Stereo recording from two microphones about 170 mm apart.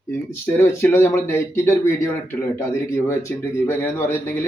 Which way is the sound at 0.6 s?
15° left (ahead or behind).